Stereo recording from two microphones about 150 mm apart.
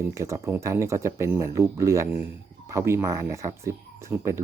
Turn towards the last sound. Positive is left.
turn(degrees=-20)  # may be behind; listen again after turning